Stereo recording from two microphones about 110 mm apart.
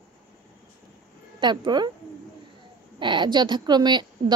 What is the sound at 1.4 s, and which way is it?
Speech, 40° right (ahead or behind).